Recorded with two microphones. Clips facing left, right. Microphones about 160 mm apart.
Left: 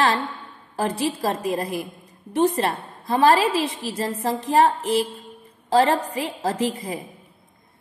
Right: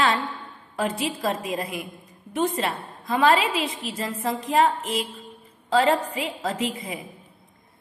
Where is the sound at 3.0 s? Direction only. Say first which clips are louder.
Left 3 dB; 35° left (ahead or behind).